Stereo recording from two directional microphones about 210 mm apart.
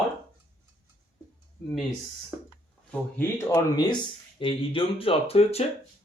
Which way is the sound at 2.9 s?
10° left (ahead or behind).